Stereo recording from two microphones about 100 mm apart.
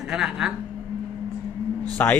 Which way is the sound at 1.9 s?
20° left (ahead or behind).